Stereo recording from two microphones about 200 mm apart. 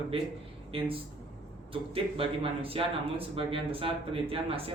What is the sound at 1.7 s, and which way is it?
Speech, 25° right (ahead or behind).